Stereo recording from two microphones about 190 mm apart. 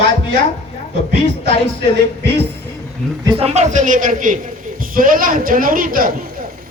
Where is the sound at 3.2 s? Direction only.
30° right (ahead or behind).